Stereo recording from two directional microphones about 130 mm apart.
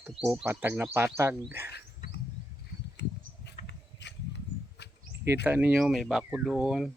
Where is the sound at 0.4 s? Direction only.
15° right (ahead or behind).